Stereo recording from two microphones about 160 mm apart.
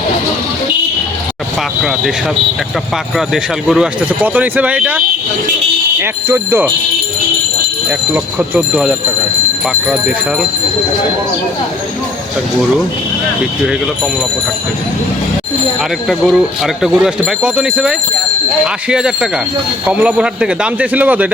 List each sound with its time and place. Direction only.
3.2 s speech: 5° right (ahead or behind)
7.9 s speech: 10° right (ahead or behind)
16.0 s speech: centre (ahead or behind)